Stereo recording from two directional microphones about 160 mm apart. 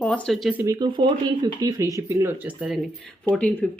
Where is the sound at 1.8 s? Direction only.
20° right (ahead or behind).